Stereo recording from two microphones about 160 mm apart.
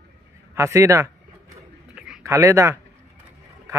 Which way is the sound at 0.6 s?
20° right (ahead or behind).